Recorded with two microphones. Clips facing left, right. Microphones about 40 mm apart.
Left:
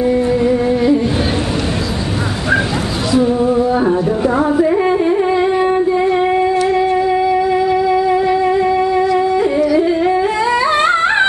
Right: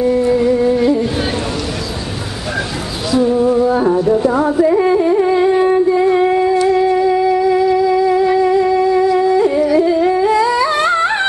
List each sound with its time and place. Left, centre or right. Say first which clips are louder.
0.0 s music: right 1 dB; centre
3.1 s music: right 1 dB; centre
6.5 s music: right 1 dB; left
9.8 s humming: right 1 dB; centre